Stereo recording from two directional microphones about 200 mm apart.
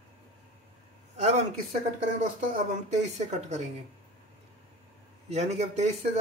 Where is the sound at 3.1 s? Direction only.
35° right (ahead or behind).